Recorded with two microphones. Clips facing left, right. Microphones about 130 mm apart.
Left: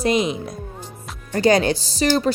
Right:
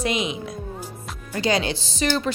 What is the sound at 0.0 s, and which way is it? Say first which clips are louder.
Speech: left 5 dB; 40° left (ahead or behind).